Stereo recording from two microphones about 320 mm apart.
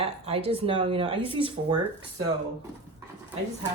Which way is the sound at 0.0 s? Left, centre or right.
Centre.